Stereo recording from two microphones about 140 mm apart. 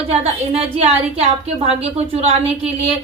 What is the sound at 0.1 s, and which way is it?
A woman's voice, 45° right (ahead or behind).